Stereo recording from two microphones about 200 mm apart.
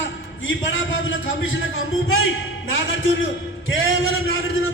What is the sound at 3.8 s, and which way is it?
Speech, 80° left.